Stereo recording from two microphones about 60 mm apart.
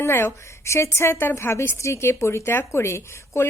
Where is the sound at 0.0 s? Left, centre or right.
Left.